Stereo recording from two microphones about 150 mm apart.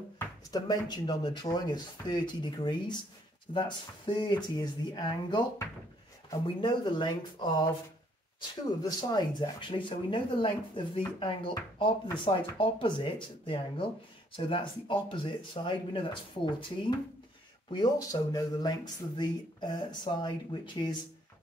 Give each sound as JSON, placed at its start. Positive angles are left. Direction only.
{"t": 0.2, "sound": "speech", "side_deg": 25}
{"t": 6.4, "sound": "speech", "side_deg": 30}
{"t": 17.8, "sound": "speech", "side_deg": 25}